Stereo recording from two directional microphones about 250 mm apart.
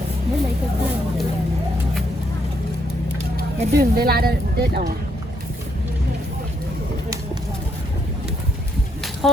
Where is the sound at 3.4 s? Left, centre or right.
Right.